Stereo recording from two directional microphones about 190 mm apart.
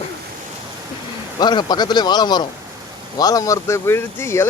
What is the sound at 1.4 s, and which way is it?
A man's voice, 20° left (ahead or behind).